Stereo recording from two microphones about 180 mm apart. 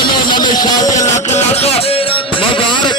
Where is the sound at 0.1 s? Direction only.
25° left (ahead or behind).